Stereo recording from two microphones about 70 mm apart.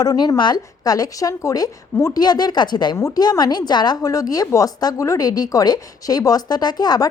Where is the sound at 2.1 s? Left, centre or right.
Left.